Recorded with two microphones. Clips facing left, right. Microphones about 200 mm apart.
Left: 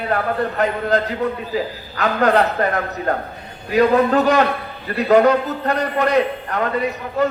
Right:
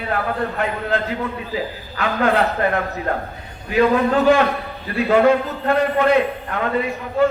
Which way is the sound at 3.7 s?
40° left (ahead or behind).